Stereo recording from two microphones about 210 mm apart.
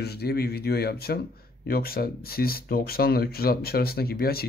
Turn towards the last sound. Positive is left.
turn(degrees=45)  # may be behind; listen again after turning